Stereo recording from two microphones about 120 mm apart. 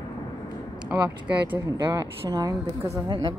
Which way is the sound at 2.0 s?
30° right (ahead or behind).